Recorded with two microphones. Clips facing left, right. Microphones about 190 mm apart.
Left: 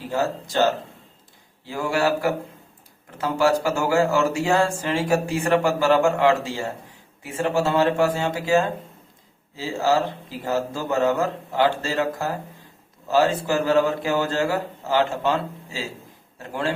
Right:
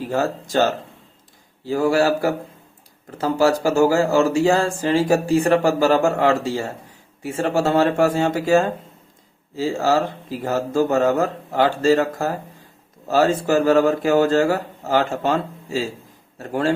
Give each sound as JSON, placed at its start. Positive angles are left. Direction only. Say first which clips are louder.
{"t": 1.6, "sound": "speech", "louder": "right 5 dB", "side_deg": -40}